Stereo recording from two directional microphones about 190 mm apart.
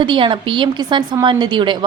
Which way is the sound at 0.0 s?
25° right (ahead or behind).